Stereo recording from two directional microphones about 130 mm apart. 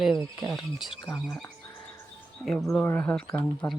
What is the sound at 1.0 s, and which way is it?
Speech, 25° left (ahead or behind).